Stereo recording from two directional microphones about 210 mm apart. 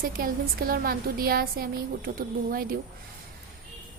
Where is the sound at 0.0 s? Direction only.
45° right (ahead or behind).